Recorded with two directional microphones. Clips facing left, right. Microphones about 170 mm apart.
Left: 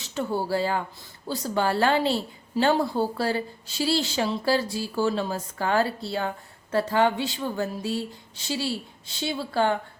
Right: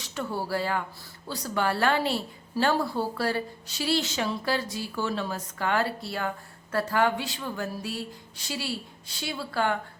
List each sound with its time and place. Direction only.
0.0 s a woman's voice: 25° left (ahead or behind)